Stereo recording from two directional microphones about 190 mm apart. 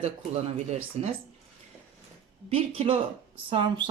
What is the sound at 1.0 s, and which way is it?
Speech, 35° right (ahead or behind).